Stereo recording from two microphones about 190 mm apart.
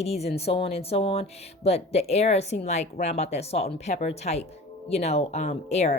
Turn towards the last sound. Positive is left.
turn(degrees=35)  # may be behind; listen again after turning